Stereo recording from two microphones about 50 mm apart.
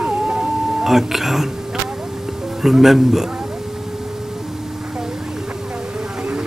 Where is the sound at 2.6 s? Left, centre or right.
Centre.